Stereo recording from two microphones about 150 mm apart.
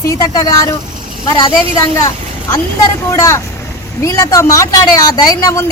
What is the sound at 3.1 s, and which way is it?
Speech, 20° left (ahead or behind).